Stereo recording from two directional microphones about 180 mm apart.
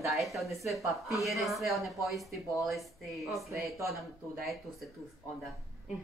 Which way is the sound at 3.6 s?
15° right (ahead or behind).